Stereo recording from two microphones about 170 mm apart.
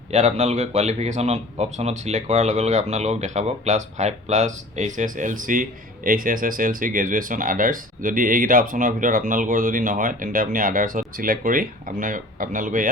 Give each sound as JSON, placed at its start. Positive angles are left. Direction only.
{"t": 0.1, "sound": "speech", "side_deg": -40}